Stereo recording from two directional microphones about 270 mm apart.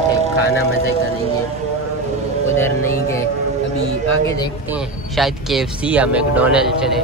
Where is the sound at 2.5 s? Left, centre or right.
Centre.